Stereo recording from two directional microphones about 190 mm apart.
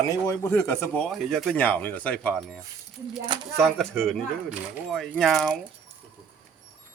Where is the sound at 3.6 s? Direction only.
Centre (ahead or behind).